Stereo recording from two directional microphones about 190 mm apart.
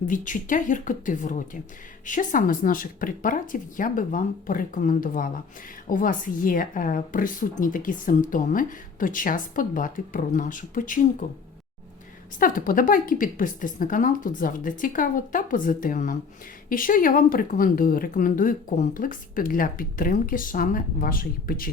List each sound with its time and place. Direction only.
0.1 s speech: 45° left (ahead or behind)
12.4 s speech: 45° left (ahead or behind)